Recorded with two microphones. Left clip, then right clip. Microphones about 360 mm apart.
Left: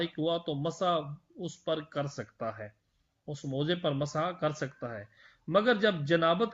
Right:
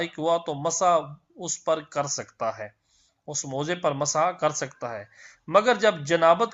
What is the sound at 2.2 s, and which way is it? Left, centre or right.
Speech, right.